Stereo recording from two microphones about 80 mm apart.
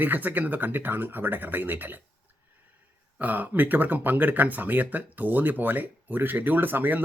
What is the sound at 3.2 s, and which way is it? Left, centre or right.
Speech, right.